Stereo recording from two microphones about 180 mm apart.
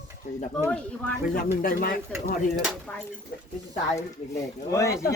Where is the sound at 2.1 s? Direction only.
10° left (ahead or behind).